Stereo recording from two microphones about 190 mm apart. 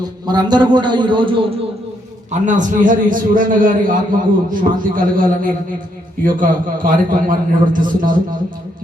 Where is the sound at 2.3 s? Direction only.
40° right (ahead or behind).